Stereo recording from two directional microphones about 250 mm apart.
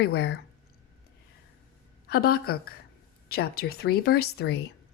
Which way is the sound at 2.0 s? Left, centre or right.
Left.